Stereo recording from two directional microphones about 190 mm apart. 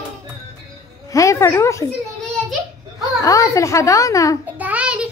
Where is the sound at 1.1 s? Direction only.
15° left (ahead or behind).